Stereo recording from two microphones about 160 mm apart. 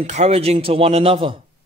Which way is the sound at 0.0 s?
45° right (ahead or behind).